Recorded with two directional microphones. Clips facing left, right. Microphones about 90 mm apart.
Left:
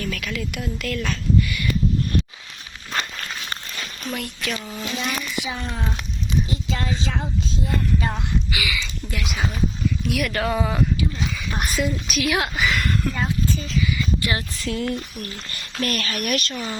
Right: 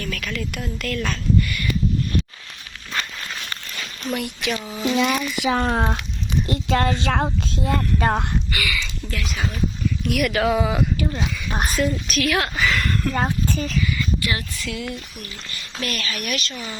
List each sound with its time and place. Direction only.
0.0 s speech: 15° left (ahead or behind)
4.0 s speech: 5° right (ahead or behind)
5.4 s speech: 65° right (ahead or behind)
8.5 s speech: 5° left (ahead or behind)
11.5 s speech: 35° right (ahead or behind)
11.8 s speech: 5° left (ahead or behind)
12.3 s speech: 15° left (ahead or behind)
12.6 s a sound: 5° left (ahead or behind)
13.1 s speech: 55° right (ahead or behind)
14.2 s speech: 25° left (ahead or behind)
14.6 s speech: 40° left (ahead or behind)